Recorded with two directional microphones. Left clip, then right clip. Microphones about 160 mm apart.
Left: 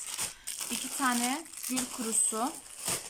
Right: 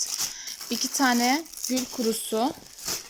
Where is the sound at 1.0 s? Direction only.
40° right (ahead or behind).